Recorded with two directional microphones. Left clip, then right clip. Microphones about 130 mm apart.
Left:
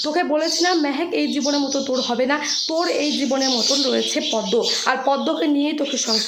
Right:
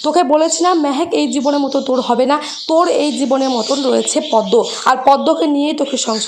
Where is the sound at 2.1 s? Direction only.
40° right (ahead or behind).